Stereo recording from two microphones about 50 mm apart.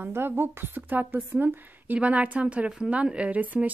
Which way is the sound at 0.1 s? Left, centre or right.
Right.